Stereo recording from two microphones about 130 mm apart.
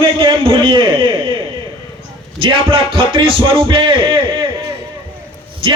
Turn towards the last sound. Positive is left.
turn(degrees=-40)  # may be behind; listen again after turning